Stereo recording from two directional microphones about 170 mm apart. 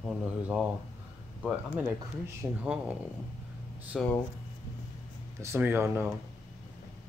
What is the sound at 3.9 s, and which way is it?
Speech, centre (ahead or behind).